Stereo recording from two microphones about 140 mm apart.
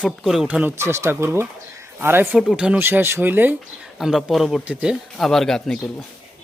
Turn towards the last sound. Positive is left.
turn(degrees=5)  # may be behind; listen again after turning